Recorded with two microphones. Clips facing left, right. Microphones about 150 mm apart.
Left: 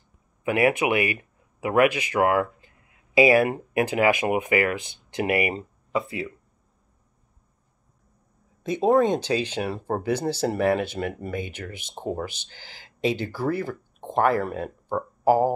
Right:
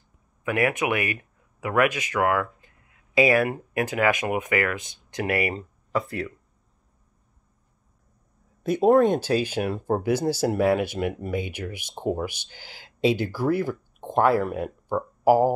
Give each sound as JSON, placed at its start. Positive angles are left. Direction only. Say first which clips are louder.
{"t": 0.4, "sound": "speech", "louder": "left 3 dB", "side_deg": 20}
{"t": 3.2, "sound": "speech", "louder": "left 2 dB", "side_deg": 15}
{"t": 3.4, "sound": "speech", "louder": "left 3 dB", "side_deg": 25}
{"t": 8.6, "sound": "speech", "louder": "right 2 dB", "side_deg": -5}